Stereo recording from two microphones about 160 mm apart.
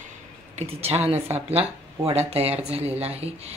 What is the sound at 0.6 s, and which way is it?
Speech, 40° right (ahead or behind).